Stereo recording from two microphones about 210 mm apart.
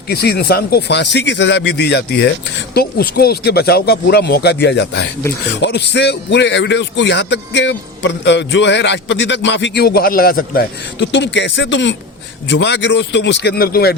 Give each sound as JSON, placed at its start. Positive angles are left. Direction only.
{"t": 0.1, "sound": "speech", "side_deg": 50}